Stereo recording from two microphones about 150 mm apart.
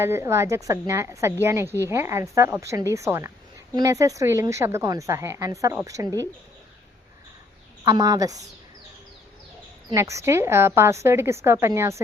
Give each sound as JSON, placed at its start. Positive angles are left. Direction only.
{"t": 0.0, "sound": "a woman's voice", "side_deg": -15}
{"t": 7.9, "sound": "a woman's voice", "side_deg": -25}
{"t": 9.9, "sound": "speech", "side_deg": -20}